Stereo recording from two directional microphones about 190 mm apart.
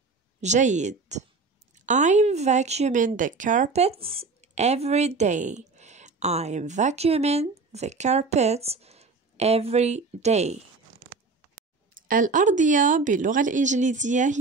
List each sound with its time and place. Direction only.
0.4 s speech: 40° right (ahead or behind)
11.9 s speech: 45° right (ahead or behind)